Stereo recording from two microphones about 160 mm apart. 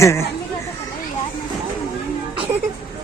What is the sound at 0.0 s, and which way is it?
Speech, 15° left (ahead or behind).